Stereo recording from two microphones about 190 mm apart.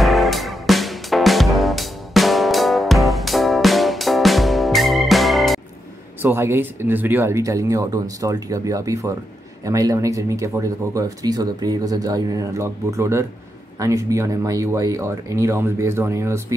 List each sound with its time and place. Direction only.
0.0 s music: centre (ahead or behind)
6.2 s speech: 15° right (ahead or behind)